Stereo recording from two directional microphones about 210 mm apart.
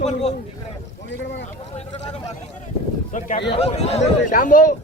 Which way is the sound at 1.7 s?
30° left (ahead or behind).